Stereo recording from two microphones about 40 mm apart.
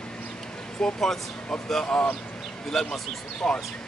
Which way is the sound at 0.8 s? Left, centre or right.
Centre.